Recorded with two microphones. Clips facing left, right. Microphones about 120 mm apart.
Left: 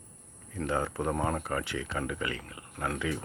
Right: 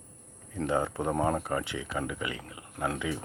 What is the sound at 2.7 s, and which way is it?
Speech, 25° right (ahead or behind).